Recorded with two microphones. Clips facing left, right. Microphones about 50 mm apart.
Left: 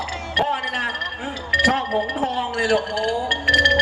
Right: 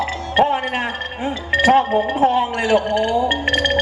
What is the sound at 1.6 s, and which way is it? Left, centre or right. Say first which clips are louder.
Speech: right 7 dB; right.